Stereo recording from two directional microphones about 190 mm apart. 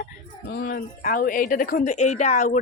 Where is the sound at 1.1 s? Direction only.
45° left (ahead or behind).